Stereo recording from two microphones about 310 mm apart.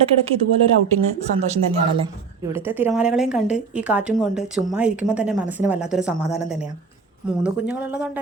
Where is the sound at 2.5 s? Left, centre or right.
Centre.